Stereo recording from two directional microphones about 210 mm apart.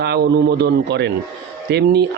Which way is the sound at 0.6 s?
50° right (ahead or behind).